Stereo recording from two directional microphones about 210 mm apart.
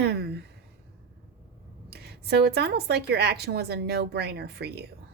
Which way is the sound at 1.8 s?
50° right (ahead or behind).